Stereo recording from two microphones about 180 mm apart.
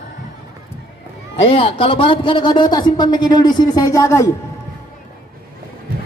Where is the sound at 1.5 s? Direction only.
30° left (ahead or behind).